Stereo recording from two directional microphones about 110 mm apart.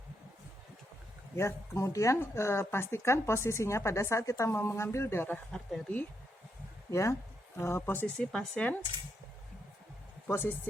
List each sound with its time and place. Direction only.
1.4 s speech: 25° left (ahead or behind)
5.5 s speech: 5° left (ahead or behind)
6.9 s speech: 30° left (ahead or behind)
8.0 s speech: 10° left (ahead or behind)
10.2 s speech: 20° left (ahead or behind)